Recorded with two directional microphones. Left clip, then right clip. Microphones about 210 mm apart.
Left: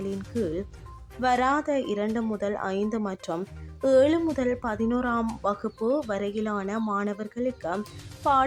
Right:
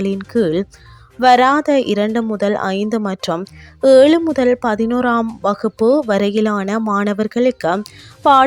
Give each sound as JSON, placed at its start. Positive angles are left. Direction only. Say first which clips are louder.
{"t": 0.0, "sound": "speech", "louder": "right 13 dB", "side_deg": -40}